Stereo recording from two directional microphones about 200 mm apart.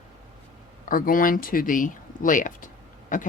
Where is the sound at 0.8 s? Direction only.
45° left (ahead or behind).